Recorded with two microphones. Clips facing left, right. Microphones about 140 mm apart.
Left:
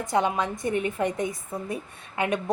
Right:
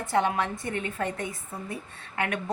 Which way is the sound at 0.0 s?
15° left (ahead or behind).